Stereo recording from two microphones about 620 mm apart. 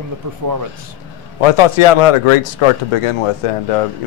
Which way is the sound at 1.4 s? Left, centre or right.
Left.